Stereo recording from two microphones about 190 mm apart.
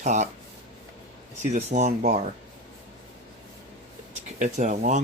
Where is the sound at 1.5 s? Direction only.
35° right (ahead or behind).